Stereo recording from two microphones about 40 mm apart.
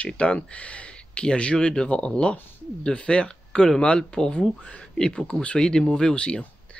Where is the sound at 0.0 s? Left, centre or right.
Left.